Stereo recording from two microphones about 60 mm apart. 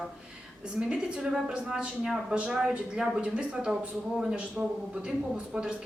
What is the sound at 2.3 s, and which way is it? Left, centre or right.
Speech, centre.